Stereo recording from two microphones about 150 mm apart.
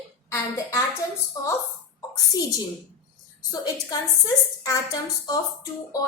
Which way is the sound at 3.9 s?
25° left (ahead or behind).